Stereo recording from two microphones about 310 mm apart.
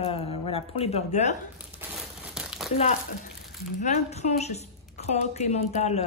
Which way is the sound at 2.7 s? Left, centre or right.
Left.